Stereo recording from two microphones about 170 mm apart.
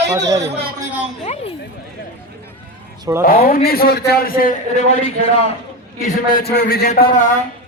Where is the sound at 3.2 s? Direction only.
65° left (ahead or behind).